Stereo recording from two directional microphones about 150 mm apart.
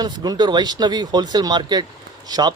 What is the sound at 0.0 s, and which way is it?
Speech, 25° right (ahead or behind).